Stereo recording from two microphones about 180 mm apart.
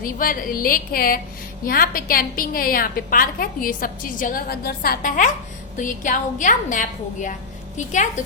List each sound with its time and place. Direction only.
0.0 s a woman's voice: 50° left (ahead or behind)